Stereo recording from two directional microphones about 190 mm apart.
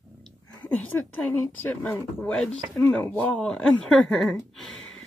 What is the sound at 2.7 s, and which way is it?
Speech, 10° left (ahead or behind).